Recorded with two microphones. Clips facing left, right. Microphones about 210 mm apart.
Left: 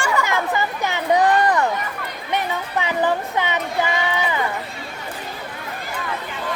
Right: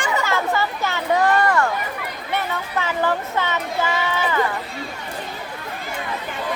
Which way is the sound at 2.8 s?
15° left (ahead or behind).